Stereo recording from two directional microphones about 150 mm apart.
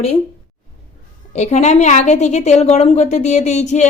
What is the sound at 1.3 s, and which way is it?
A woman's voice, 50° left (ahead or behind).